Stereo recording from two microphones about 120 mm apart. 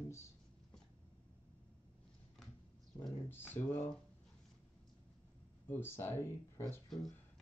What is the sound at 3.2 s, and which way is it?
Speech, 15° left (ahead or behind).